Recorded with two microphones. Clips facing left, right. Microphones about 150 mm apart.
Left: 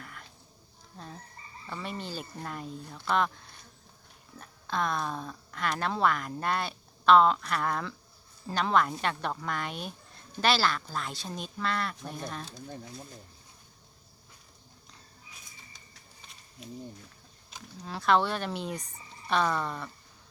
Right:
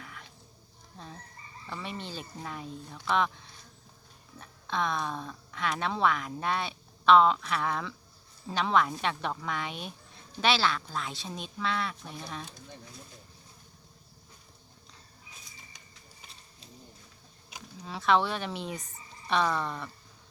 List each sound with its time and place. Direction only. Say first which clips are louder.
0.0 s insect: even; centre (ahead or behind)
0.9 s fowl: left 1 dB; centre (ahead or behind)
1.6 s a woman's voice: left 1 dB; centre (ahead or behind)
16.6 s speech: left 12 dB; 30° right (ahead or behind)
17.8 s a woman's voice: even; centre (ahead or behind)